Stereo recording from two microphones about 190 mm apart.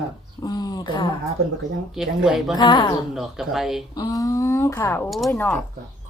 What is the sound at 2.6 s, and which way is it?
Speech, 25° left (ahead or behind).